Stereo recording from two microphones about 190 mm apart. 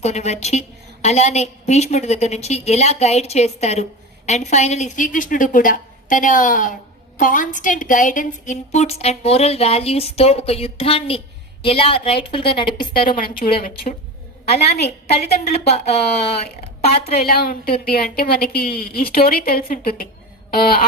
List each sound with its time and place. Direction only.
0.0 s a woman's voice: 35° left (ahead or behind)
13.1 s a woman's voice: 50° left (ahead or behind)
14.4 s a woman's voice: 35° left (ahead or behind)
17.2 s a woman's voice: 50° left (ahead or behind)